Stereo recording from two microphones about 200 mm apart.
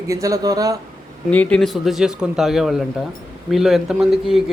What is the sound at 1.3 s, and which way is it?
Speech, 5° left (ahead or behind).